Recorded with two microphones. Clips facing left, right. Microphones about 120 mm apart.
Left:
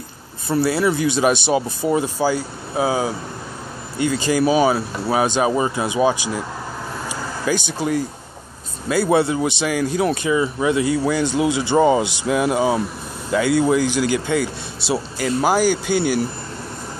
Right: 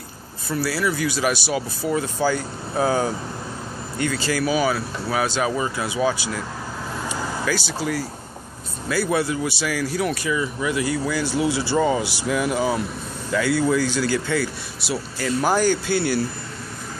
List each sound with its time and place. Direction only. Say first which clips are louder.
0.5 s speech: left 5 dB; 25° left (ahead or behind)
7.4 s speech: left 5 dB; 20° left (ahead or behind)